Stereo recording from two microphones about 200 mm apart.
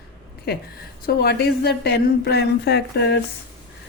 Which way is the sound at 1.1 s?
50° left (ahead or behind).